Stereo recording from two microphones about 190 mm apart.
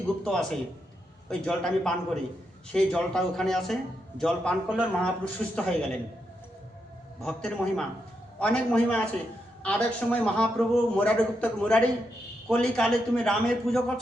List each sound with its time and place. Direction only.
0.3 s a man's voice: centre (ahead or behind)
7.2 s a man's voice: 5° left (ahead or behind)